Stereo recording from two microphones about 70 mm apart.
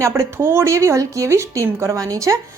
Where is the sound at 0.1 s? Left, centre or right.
Right.